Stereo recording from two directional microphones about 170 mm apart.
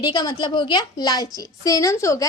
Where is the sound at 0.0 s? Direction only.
25° left (ahead or behind).